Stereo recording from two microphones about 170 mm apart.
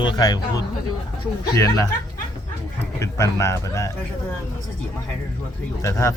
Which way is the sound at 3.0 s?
15° left (ahead or behind).